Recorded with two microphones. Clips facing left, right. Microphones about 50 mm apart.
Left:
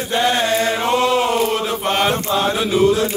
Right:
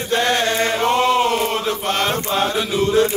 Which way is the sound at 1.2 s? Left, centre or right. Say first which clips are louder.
Left 1 dB; centre.